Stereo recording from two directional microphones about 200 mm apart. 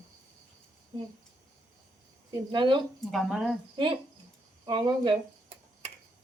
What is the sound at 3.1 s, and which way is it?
Speech, centre (ahead or behind).